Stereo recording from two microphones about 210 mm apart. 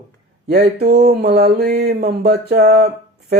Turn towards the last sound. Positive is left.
turn(degrees=-50)  # may be behind; listen again after turning